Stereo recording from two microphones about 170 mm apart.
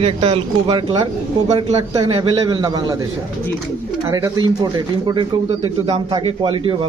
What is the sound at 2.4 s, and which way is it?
Speech, 25° right (ahead or behind).